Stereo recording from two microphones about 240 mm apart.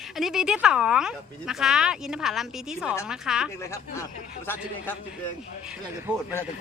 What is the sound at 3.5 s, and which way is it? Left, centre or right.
Speech, centre.